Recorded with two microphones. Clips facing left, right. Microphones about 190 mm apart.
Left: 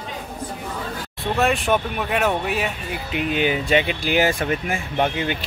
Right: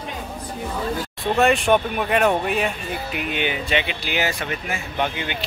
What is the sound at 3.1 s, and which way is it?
Speech, 35° left (ahead or behind).